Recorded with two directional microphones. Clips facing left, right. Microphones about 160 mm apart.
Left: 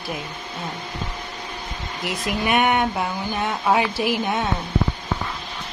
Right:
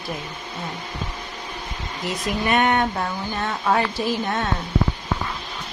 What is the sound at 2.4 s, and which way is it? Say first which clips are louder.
Speech: even; 10° left (ahead or behind).